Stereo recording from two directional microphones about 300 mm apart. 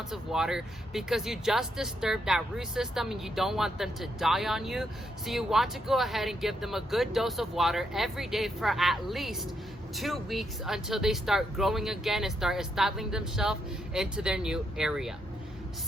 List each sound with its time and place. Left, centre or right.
0.1 s speech: centre